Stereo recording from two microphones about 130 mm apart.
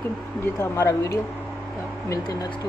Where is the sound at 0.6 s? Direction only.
25° left (ahead or behind).